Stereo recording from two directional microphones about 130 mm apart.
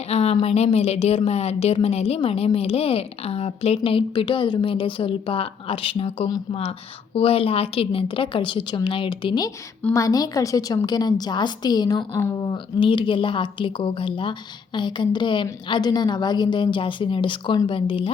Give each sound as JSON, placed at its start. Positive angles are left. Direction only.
{"t": 0.1, "sound": "a woman's voice", "side_deg": 55}